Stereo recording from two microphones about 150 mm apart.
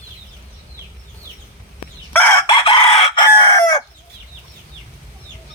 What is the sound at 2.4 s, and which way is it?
Chicken, 35° left (ahead or behind).